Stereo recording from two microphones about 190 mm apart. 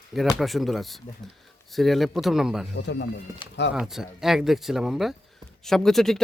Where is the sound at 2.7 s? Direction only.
70° left (ahead or behind).